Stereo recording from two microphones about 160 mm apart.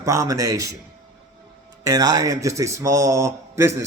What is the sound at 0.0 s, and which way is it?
Speech, 20° right (ahead or behind).